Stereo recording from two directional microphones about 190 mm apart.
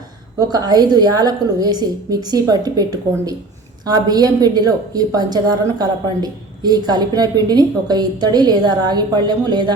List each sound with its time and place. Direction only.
0.3 s a woman's voice: 20° right (ahead or behind)